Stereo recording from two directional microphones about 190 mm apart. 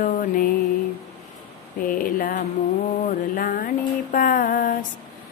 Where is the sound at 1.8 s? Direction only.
45° left (ahead or behind).